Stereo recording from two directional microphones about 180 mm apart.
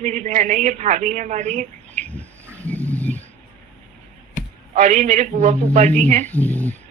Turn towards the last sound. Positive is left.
turn(degrees=10)  # may be behind; listen again after turning